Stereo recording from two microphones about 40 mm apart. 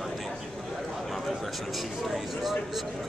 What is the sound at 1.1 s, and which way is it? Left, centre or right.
A man's voice, centre.